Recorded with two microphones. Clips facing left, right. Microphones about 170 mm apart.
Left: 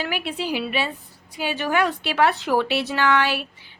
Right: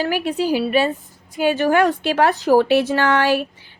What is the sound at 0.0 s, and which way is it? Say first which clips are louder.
A woman's voice: right 7 dB; 40° right (ahead or behind).